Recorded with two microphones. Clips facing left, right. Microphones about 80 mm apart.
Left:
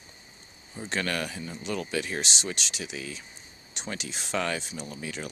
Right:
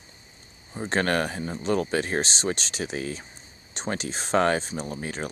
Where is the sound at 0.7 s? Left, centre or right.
Right.